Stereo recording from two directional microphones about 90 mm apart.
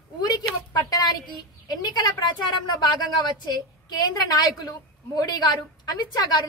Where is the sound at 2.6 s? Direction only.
50° left (ahead or behind).